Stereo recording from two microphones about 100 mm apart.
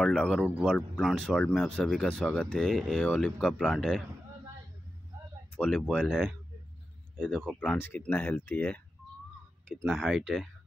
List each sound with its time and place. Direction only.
0.0 s speech: 10° left (ahead or behind)
5.6 s speech: 5° left (ahead or behind)
7.7 s speech: 20° left (ahead or behind)
9.7 s speech: centre (ahead or behind)